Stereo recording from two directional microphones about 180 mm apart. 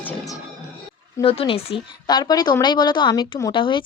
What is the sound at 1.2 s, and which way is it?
A woman's voice, 30° left (ahead or behind).